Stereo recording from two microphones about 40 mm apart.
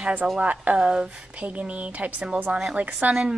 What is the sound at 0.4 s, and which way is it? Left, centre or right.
Speech, right.